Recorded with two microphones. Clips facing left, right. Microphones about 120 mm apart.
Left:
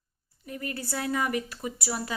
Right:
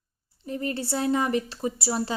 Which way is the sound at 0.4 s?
30° right (ahead or behind).